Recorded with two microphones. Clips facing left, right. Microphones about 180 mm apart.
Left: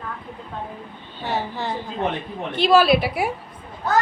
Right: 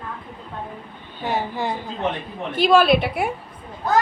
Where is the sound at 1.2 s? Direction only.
15° right (ahead or behind).